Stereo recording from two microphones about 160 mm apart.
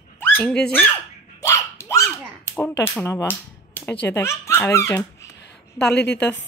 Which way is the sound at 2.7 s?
15° left (ahead or behind).